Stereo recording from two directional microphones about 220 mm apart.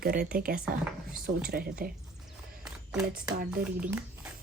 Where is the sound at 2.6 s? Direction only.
Centre (ahead or behind).